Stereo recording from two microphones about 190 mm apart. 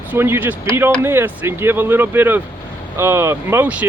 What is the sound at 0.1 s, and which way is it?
Speech, 10° right (ahead or behind).